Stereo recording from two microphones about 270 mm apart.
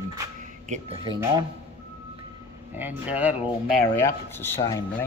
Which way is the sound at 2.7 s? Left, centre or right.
Centre.